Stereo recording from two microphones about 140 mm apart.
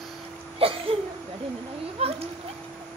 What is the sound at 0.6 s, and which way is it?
Laughter, 40° right (ahead or behind).